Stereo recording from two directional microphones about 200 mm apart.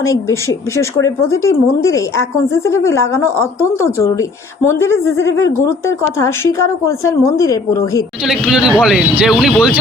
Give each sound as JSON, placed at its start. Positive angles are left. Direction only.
{"t": 0.0, "sound": "speech", "side_deg": 15}
{"t": 8.2, "sound": "speech", "side_deg": -5}